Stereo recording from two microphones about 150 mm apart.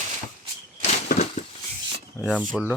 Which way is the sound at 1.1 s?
65° left (ahead or behind).